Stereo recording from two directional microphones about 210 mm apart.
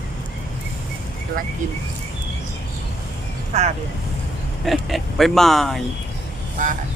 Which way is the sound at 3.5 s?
30° right (ahead or behind).